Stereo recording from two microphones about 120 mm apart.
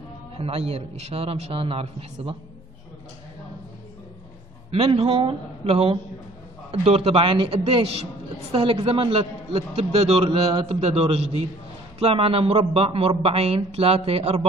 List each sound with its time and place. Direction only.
0.4 s a man's voice: 55° right (ahead or behind)
4.6 s a man's voice: 55° right (ahead or behind)